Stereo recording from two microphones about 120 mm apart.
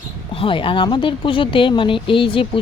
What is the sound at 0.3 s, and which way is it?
Speech, 45° left (ahead or behind).